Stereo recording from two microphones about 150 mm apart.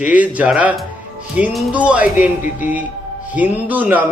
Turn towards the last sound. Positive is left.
turn(degrees=-10)  # may be behind; listen again after turning